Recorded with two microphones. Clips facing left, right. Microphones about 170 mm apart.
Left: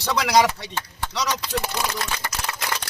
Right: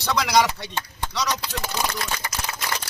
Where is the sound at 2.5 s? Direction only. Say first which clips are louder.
Left 2 dB; 60° left (ahead or behind).